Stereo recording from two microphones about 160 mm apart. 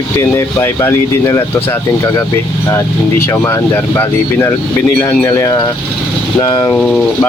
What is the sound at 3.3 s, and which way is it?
Speech, 15° left (ahead or behind).